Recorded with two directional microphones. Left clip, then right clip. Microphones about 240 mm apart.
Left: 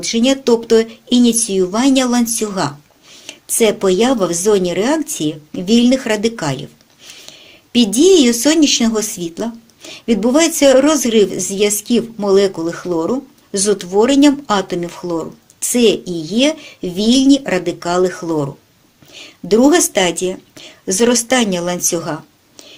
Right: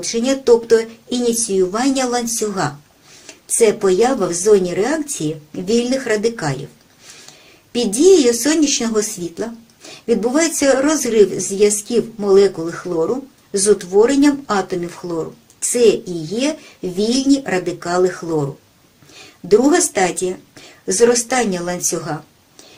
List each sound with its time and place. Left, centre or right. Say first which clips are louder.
0.0 s a woman's voice: left 3 dB; left
19.5 s a woman's voice: left 2 dB; left